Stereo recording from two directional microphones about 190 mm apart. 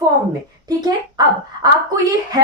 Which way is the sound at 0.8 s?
20° right (ahead or behind).